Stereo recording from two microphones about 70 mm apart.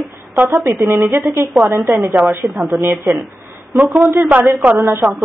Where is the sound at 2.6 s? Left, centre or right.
Centre.